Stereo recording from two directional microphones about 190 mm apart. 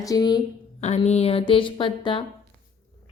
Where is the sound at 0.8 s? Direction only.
35° left (ahead or behind).